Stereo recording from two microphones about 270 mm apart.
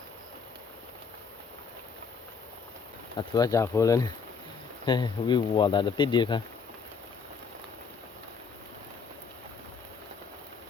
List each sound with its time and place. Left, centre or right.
3.2 s speech: centre